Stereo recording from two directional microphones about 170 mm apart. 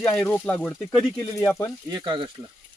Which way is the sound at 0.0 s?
10° left (ahead or behind).